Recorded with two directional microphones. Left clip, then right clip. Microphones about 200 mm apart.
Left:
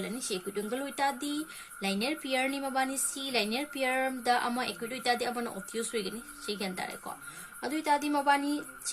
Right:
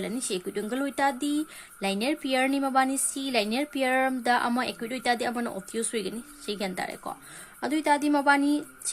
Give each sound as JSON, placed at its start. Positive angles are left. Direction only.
{"t": 0.0, "sound": "speech", "side_deg": -50}